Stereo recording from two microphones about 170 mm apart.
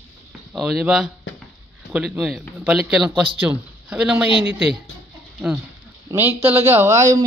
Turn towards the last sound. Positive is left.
turn(degrees=-20)  # may be behind; listen again after turning